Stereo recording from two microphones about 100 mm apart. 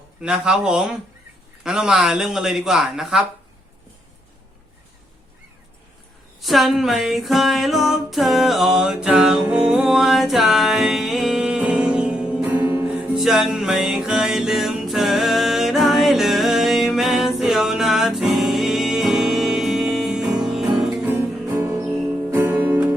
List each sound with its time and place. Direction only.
0.2 s speech: 10° right (ahead or behind)
6.4 s music: centre (ahead or behind); by 13.1 s 15° right (ahead or behind)
13.1 s music: 5° right (ahead or behind)
21.0 s music: 20° right (ahead or behind)
21.8 s music: 15° right (ahead or behind)